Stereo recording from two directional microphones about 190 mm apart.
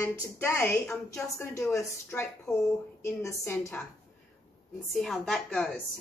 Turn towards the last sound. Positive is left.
turn(degrees=0)  # may be behind; listen again after turning